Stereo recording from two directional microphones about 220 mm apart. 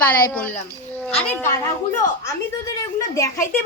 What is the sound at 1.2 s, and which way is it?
Speech, 5° left (ahead or behind).